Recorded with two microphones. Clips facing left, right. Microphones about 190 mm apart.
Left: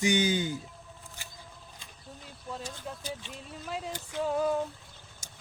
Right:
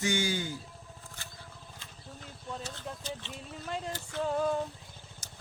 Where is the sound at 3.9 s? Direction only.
15° left (ahead or behind).